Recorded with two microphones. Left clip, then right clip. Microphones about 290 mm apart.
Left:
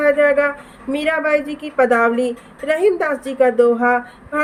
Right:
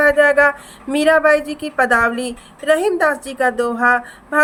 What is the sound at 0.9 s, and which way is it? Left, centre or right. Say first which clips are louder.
A woman's voice: right 5 dB; centre.